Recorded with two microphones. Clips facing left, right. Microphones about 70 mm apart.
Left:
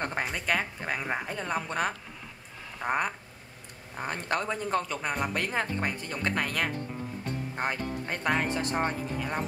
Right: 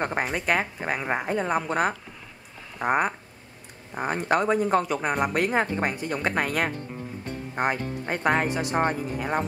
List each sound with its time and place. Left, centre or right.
0.3 s a woman's voice: centre
8.2 s a woman's voice: right
8.5 s a woman's voice: centre
8.7 s a woman's voice: right